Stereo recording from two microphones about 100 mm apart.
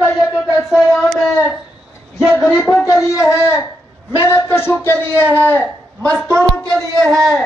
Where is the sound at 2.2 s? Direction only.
Centre (ahead or behind).